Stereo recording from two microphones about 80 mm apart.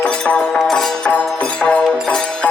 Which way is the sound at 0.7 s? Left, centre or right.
Centre.